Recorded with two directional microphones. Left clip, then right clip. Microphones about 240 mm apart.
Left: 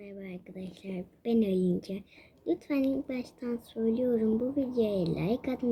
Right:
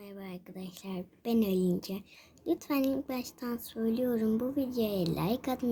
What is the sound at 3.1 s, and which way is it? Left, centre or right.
Speech, right.